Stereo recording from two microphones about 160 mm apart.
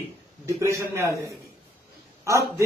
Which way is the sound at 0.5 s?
20° right (ahead or behind).